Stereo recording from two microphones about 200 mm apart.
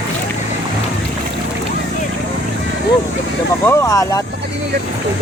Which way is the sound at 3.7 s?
15° left (ahead or behind).